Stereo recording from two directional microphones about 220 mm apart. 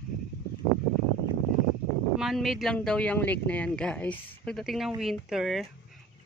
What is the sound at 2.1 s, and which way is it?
Speech, centre (ahead or behind).